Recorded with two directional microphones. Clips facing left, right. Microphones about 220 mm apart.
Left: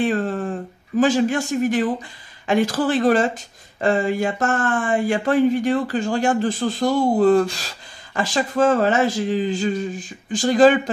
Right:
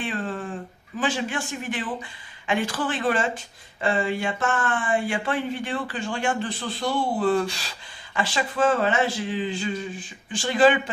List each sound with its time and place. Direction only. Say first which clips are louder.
0.0 s speech: left 8 dB; 40° left (ahead or behind)